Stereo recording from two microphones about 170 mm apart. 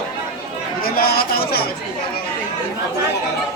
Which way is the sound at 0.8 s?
65° left (ahead or behind).